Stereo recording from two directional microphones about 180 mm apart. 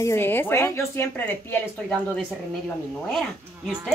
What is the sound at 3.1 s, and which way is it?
Speech, centre (ahead or behind).